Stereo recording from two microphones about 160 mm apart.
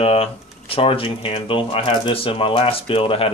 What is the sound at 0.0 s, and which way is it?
Speech, 35° left (ahead or behind).